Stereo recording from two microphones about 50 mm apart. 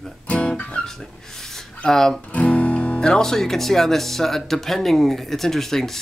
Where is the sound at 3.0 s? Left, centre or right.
Centre.